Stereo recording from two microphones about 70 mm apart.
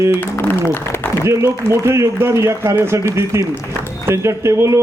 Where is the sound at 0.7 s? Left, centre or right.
Left.